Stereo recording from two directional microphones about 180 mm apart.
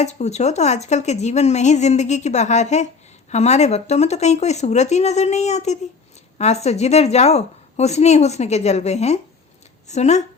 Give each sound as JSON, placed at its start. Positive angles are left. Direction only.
{"t": 0.0, "sound": "a woman's voice", "side_deg": 40}